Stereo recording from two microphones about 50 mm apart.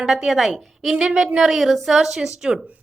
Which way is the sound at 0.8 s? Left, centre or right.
Centre.